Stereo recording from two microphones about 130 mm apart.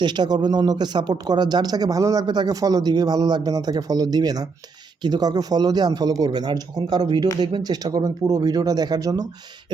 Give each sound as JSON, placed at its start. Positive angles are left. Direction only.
{"t": 0.0, "sound": "speech", "side_deg": -35}